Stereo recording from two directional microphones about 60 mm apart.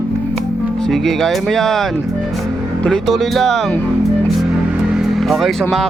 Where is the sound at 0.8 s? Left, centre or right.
Centre.